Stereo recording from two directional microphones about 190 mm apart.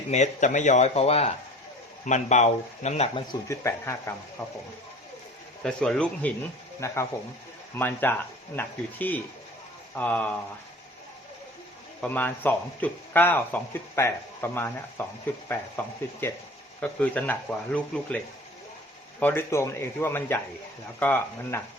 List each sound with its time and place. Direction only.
0.1 s speech: 40° left (ahead or behind)
3.5 s speech: 15° left (ahead or behind)
5.6 s speech: 5° left (ahead or behind)
11.9 s speech: 10° left (ahead or behind)
16.8 s speech: 10° left (ahead or behind)
19.2 s speech: 10° left (ahead or behind)